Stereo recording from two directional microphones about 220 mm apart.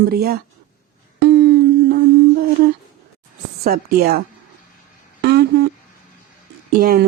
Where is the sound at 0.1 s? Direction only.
45° right (ahead or behind).